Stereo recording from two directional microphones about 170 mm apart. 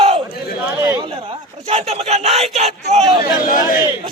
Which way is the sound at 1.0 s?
35° right (ahead or behind).